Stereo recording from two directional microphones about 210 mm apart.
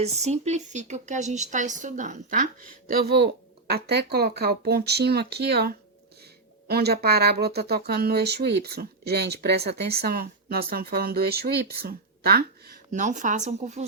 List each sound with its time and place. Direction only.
0.0 s speech: 30° right (ahead or behind)